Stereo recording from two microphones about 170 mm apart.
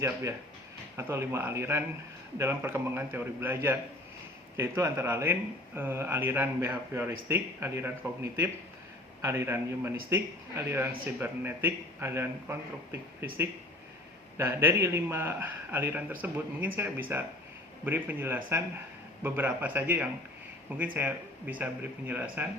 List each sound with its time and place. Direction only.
0.0 s speech: 15° right (ahead or behind)
14.3 s speech: 15° right (ahead or behind)